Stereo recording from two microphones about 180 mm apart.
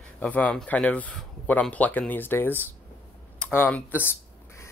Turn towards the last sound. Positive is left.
turn(degrees=10)  # may be behind; listen again after turning